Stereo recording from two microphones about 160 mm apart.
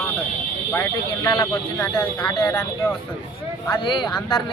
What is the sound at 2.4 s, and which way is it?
Speech, 20° left (ahead or behind).